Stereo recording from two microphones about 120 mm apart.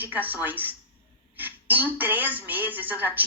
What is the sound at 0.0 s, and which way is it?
A woman's voice, 15° right (ahead or behind).